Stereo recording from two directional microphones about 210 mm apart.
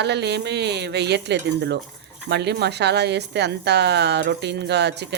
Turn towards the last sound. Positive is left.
turn(degrees=-50)  # may be behind; listen again after turning